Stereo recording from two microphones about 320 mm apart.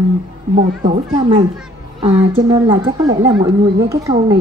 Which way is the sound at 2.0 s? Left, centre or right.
Centre.